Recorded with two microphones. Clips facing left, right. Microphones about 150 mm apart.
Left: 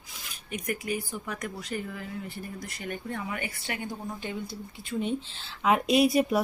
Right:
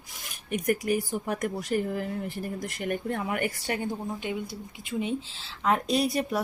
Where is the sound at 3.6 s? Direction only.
35° right (ahead or behind).